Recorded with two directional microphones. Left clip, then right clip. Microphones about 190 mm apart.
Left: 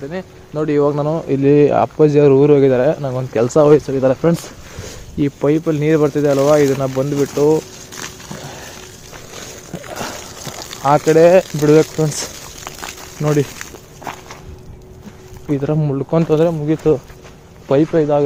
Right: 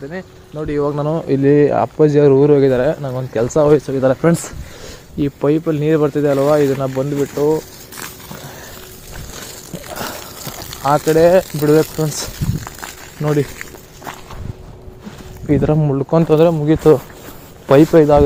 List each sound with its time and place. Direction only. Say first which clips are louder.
0.5 s speech: left 5 dB; 40° left (ahead or behind)
1.0 s speech: right 1 dB; 10° right (ahead or behind)
1.4 s speech: left 1 dB; 5° left (ahead or behind)
3.7 s speech: left 1 dB; centre (ahead or behind); by 7.6 s 15° left (ahead or behind)
7.9 s a sound: left 1 dB; 20° right (ahead or behind)
8.4 s a sound: left 2 dB; 15° left (ahead or behind)
9.9 s a sound: even; 5° right (ahead or behind)
10.4 s a sound: left 1 dB; 25° right (ahead or behind)
10.8 s speech: left 2 dB; centre (ahead or behind)
13.1 s speech: left 1 dB; 10° left (ahead or behind)
15.4 s speech: right 3 dB; 15° right (ahead or behind)
16.5 s speech: right 4 dB; 25° right (ahead or behind)